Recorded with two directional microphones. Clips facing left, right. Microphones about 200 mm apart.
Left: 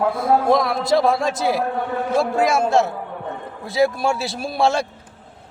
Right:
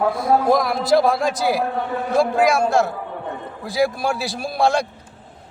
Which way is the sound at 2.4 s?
25° left (ahead or behind).